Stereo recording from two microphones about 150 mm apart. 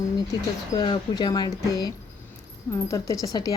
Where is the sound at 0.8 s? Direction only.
30° left (ahead or behind).